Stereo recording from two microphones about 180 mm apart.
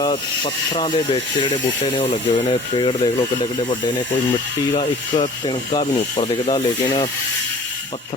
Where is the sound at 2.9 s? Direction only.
25° left (ahead or behind).